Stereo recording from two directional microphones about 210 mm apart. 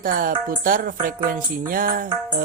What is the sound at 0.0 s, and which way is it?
Speech, 40° right (ahead or behind).